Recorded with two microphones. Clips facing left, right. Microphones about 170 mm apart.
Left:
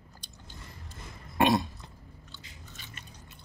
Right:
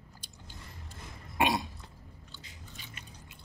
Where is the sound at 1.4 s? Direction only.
10° right (ahead or behind).